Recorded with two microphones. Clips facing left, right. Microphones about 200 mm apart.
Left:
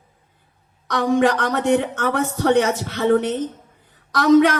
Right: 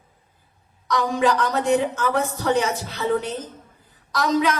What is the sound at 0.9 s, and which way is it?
A woman's voice, 60° left (ahead or behind).